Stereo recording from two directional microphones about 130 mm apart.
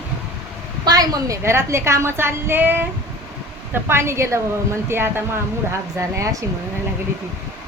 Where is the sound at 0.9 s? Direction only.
30° right (ahead or behind).